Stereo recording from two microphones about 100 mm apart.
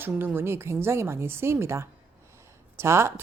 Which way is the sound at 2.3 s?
25° right (ahead or behind).